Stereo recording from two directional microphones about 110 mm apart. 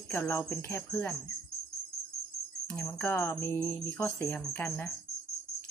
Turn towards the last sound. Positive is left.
turn(degrees=20)  # may be behind; listen again after turning